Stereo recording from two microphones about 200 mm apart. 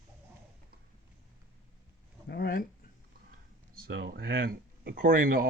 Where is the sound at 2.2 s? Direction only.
55° left (ahead or behind).